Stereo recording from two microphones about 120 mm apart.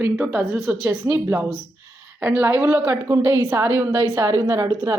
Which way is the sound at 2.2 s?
10° right (ahead or behind).